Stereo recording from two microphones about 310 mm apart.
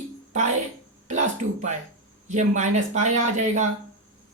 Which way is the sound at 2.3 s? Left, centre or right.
Right.